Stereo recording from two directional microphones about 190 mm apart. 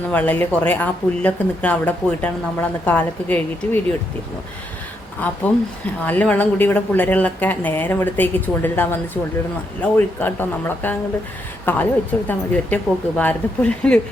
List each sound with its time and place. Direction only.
0.1 s speech: 10° left (ahead or behind)
5.2 s a woman's voice: 10° left (ahead or behind)